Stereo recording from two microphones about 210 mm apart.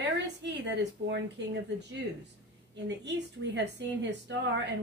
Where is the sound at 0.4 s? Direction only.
55° right (ahead or behind).